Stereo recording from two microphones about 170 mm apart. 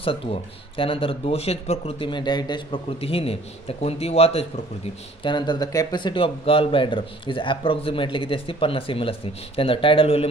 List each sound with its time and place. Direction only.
0.0 s speech: 35° left (ahead or behind)